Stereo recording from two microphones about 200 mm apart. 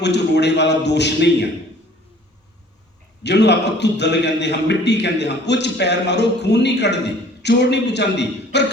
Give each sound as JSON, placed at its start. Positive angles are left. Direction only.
{"t": 0.0, "sound": "a man's voice", "side_deg": 60}
{"t": 3.2, "sound": "a man's voice", "side_deg": 60}